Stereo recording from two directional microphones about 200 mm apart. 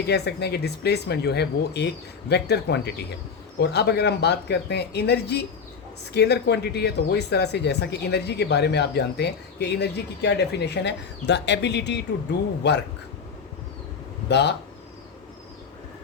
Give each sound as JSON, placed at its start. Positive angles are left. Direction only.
{"t": 0.1, "sound": "speech", "side_deg": 55}
{"t": 14.3, "sound": "speech", "side_deg": 60}